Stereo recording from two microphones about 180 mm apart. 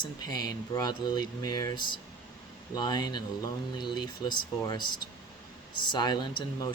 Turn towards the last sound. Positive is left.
turn(degrees=25)  # may be behind; listen again after turning